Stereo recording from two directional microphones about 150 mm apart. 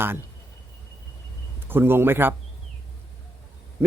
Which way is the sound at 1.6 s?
15° right (ahead or behind).